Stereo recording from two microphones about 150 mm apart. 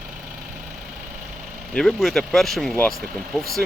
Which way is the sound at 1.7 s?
5° left (ahead or behind).